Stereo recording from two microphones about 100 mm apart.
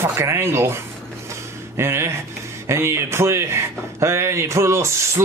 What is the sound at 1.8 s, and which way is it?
Speech, 25° right (ahead or behind).